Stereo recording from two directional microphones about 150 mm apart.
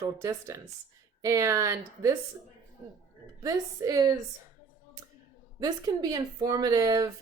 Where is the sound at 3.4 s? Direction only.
20° right (ahead or behind).